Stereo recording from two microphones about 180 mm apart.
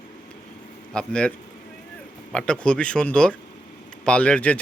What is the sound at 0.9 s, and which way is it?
Speech, 5° left (ahead or behind).